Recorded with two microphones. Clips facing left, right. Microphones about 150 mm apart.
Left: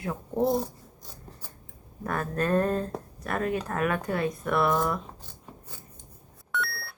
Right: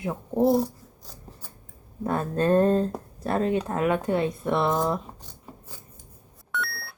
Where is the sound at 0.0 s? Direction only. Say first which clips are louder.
Right 3 dB; 20° right (ahead or behind).